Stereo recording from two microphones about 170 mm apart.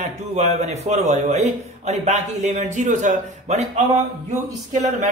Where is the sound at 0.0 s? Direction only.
40° right (ahead or behind).